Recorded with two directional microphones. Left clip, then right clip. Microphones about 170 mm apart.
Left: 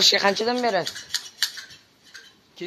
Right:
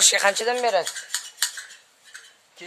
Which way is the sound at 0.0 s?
20° right (ahead or behind).